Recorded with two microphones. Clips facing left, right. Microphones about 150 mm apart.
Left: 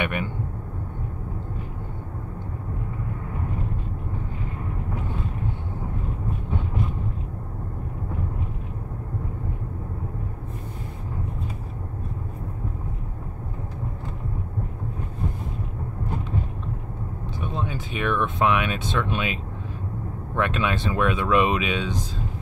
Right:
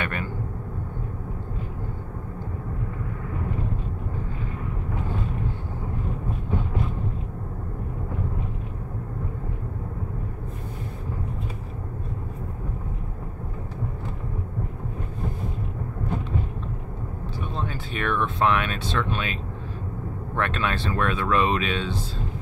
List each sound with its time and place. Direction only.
0.0 s vehicle: 15° left (ahead or behind)
17.6 s speech: 10° left (ahead or behind)
20.3 s speech: 10° left (ahead or behind)